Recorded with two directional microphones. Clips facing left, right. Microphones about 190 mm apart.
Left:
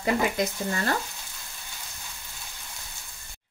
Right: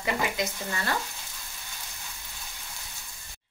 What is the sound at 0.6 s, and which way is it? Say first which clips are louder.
Frying: left 4 dB; 35° left (ahead or behind).